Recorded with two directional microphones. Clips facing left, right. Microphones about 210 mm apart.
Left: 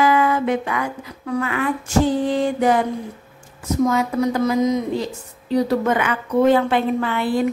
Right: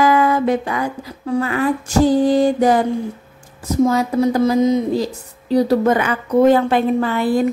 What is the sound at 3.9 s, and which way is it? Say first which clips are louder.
A woman's voice: right 3 dB; 30° right (ahead or behind).